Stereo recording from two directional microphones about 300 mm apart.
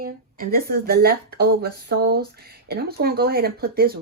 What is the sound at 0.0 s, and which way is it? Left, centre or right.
Speech, right.